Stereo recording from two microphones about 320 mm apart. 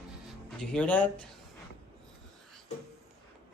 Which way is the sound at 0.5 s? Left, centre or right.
Centre.